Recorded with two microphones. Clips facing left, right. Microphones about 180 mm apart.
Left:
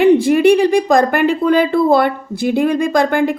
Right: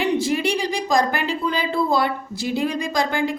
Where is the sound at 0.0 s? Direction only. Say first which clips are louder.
Left 11 dB; 55° left (ahead or behind).